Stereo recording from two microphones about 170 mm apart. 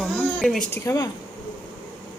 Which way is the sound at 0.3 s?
Centre (ahead or behind).